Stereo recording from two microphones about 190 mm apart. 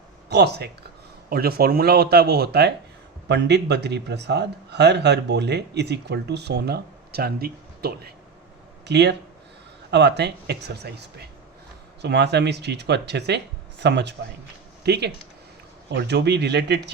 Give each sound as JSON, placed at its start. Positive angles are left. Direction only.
{"t": 0.3, "sound": "speech", "side_deg": -60}